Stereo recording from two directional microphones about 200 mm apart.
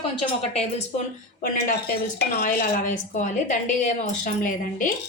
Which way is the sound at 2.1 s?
45° left (ahead or behind).